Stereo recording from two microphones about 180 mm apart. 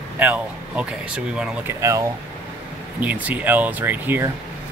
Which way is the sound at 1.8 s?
15° right (ahead or behind).